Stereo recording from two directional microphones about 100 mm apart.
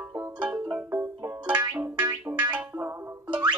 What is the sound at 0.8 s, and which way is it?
Music, 30° right (ahead or behind).